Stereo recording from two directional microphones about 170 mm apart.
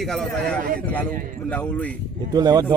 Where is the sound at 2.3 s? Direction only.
25° right (ahead or behind).